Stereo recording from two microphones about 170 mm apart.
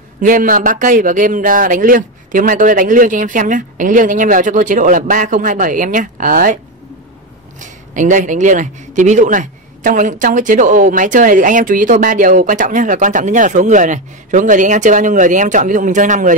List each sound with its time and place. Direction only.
0.2 s speech: 50° right (ahead or behind)